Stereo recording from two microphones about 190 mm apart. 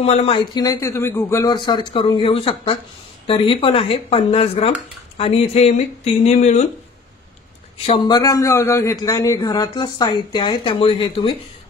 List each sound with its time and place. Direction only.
0.0 s a man's voice: 30° left (ahead or behind)
7.7 s a man's voice: 30° left (ahead or behind)